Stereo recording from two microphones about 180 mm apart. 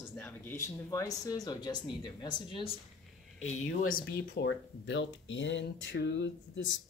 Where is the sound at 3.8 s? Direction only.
55° left (ahead or behind).